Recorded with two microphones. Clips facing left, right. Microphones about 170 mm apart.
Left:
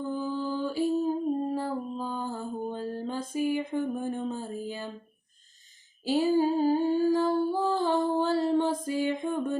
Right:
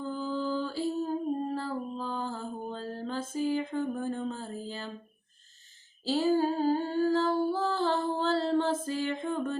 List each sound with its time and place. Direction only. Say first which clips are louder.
0.1 s lullaby: right 1 dB; 15° left (ahead or behind)
6.1 s humming: left 2 dB; 15° left (ahead or behind)